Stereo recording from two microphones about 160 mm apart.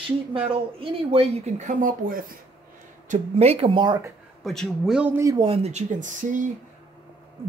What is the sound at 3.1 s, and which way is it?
Speech, 40° right (ahead or behind).